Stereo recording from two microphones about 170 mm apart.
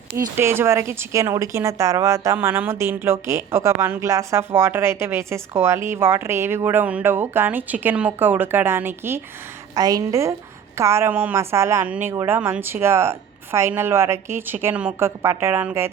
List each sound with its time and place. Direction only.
0.3 s a woman's voice: 15° right (ahead or behind)